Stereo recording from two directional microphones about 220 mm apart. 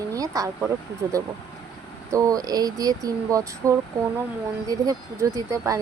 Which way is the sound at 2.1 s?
15° right (ahead or behind).